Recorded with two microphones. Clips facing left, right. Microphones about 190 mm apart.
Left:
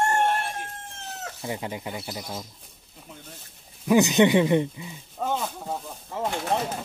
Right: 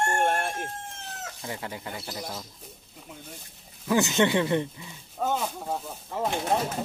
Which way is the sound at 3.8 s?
15° left (ahead or behind).